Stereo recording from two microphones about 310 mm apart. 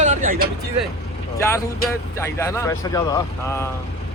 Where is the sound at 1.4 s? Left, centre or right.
Centre.